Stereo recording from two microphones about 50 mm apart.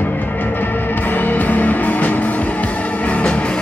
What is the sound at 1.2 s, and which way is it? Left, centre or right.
Music, left.